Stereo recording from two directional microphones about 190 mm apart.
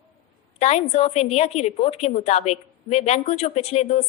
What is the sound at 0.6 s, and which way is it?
A woman's voice, 35° left (ahead or behind).